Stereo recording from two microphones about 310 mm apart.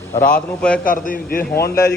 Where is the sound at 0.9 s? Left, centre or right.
Left.